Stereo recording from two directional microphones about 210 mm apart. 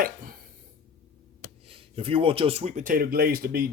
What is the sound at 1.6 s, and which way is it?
Speech, 25° right (ahead or behind).